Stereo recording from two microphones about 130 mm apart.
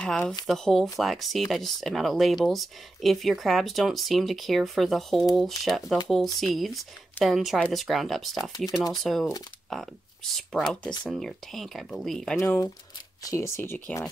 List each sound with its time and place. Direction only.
0.0 s speech: 5° left (ahead or behind)
12.4 s speech: 20° left (ahead or behind)